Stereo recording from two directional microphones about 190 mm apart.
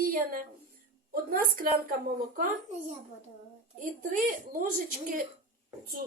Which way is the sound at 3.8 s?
45° right (ahead or behind).